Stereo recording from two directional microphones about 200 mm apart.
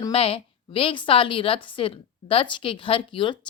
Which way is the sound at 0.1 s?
30° left (ahead or behind).